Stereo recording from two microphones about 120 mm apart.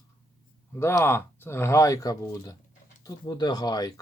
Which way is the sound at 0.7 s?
20° left (ahead or behind).